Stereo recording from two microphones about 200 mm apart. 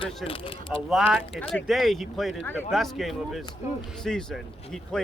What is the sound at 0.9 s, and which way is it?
Speech, centre (ahead or behind).